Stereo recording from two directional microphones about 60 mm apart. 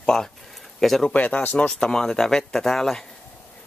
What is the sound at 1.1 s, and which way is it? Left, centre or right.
Speech, left.